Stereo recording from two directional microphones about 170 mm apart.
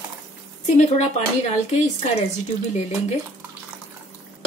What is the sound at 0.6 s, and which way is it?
Speech, 40° left (ahead or behind).